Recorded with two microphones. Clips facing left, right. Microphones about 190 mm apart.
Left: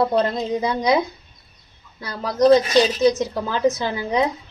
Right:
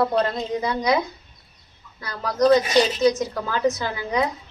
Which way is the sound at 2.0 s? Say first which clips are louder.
Left 2 dB; 25° left (ahead or behind).